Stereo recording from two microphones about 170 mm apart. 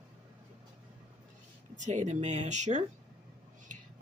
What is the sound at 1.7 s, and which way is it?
Speech, 45° right (ahead or behind).